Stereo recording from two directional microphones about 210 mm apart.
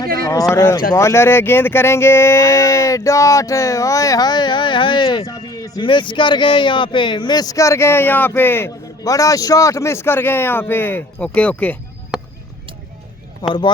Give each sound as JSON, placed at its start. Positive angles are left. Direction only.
{"t": 0.5, "sound": "speech", "side_deg": 15}
{"t": 13.4, "sound": "speech", "side_deg": 20}